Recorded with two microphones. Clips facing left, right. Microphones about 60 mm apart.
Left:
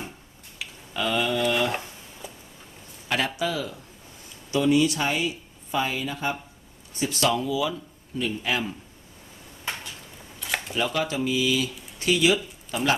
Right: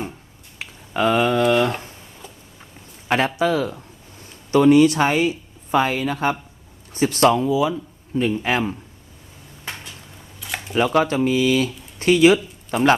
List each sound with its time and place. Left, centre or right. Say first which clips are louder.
0.6 s a sound: right 8 dB; right
3.1 s a man's voice: right 7 dB; right
7.3 s speech: right 7 dB; right
8.1 s a man's voice: right 7 dB; right
10.4 s camera: left 1 dB; centre
10.9 s speech: right 9 dB; right